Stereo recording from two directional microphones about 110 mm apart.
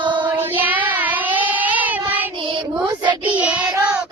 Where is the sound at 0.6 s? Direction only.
15° right (ahead or behind).